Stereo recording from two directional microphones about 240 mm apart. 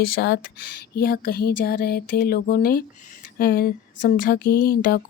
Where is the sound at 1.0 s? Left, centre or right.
Left.